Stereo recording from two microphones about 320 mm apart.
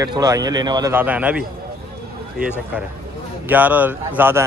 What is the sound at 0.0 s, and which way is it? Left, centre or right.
A man's voice, centre.